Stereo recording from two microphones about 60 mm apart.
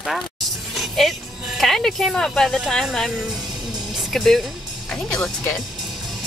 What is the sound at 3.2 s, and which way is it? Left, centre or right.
Music, centre.